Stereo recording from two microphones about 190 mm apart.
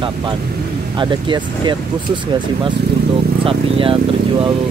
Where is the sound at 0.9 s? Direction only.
25° right (ahead or behind).